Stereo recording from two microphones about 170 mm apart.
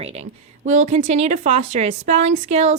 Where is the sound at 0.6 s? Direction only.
45° right (ahead or behind).